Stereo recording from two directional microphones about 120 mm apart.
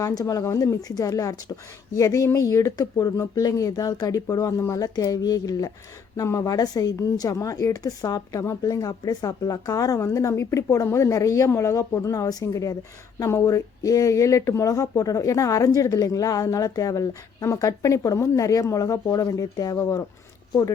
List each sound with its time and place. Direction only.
0.0 s speech: 30° left (ahead or behind)